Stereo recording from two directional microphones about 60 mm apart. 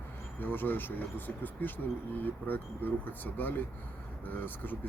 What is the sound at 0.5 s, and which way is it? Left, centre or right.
Speech, left.